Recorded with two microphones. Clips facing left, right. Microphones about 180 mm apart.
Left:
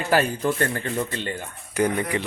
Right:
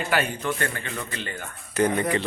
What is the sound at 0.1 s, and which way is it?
A man's voice, 35° left (ahead or behind).